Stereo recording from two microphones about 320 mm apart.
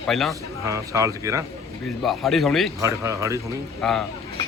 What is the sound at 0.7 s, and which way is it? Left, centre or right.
Speech, centre.